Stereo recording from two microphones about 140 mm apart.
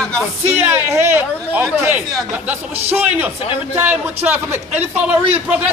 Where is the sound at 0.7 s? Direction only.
15° right (ahead or behind).